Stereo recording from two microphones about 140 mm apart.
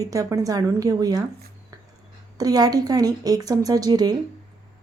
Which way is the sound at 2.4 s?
25° right (ahead or behind).